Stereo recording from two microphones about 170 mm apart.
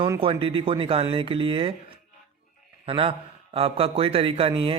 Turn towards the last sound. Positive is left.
turn(degrees=-30)  # may be behind; listen again after turning